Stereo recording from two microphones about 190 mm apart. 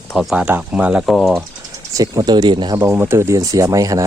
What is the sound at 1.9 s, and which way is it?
Speech, 20° right (ahead or behind).